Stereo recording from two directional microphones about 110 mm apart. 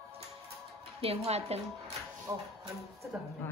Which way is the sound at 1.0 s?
70° right (ahead or behind).